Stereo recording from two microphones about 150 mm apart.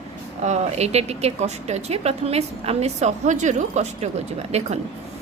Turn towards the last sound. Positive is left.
turn(degrees=-45)  # may be behind; listen again after turning